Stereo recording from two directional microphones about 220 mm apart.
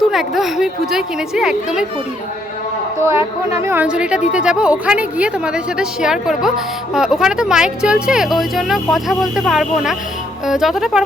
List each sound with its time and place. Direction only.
0.1 s speech: centre (ahead or behind)
3.0 s a woman's voice: 10° right (ahead or behind)